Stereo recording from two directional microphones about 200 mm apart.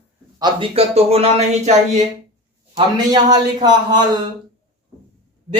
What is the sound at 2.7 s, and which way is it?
Speech, 20° right (ahead or behind).